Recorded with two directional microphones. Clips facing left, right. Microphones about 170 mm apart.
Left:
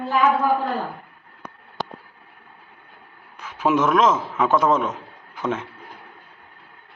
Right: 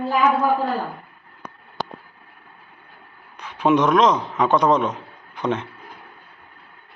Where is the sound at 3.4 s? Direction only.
5° left (ahead or behind).